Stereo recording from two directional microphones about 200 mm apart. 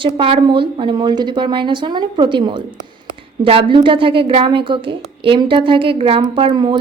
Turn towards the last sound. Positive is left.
turn(degrees=-25)  # may be behind; listen again after turning